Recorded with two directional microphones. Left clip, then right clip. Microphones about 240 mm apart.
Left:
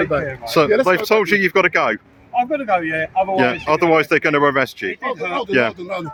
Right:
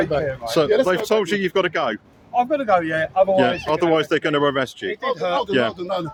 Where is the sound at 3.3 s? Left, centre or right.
Centre.